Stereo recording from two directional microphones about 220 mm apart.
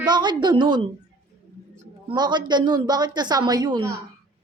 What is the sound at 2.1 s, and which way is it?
A woman's voice, 20° right (ahead or behind).